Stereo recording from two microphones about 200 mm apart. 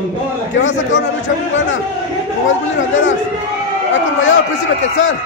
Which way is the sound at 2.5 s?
70° left (ahead or behind).